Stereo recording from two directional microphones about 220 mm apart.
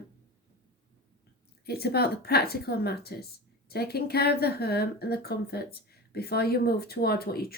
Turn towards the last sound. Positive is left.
turn(degrees=45)  # may be behind; listen again after turning